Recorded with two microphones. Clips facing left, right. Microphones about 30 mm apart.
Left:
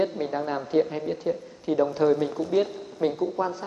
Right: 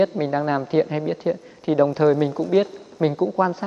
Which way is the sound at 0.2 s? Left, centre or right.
Right.